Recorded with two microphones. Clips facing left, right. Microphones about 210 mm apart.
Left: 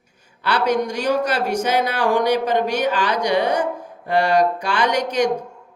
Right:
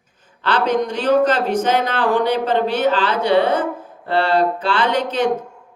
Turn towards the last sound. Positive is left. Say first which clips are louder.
# right 1 dB
turn(degrees=15)  # may be behind; listen again after turning